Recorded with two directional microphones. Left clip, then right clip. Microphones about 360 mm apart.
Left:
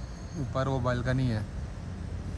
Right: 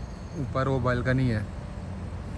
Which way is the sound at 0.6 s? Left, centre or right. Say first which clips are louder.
Right 3 dB; centre.